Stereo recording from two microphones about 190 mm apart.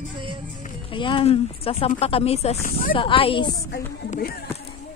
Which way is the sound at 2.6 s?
45° left (ahead or behind).